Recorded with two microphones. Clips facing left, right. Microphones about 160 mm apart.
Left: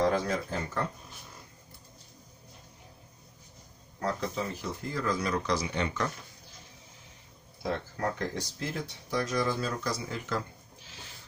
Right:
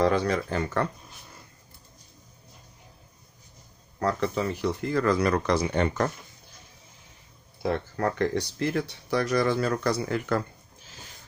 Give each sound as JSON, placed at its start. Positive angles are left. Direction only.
{"t": 0.0, "sound": "speech", "side_deg": -70}
{"t": 4.0, "sound": "speech", "side_deg": -70}
{"t": 7.6, "sound": "speech", "side_deg": -65}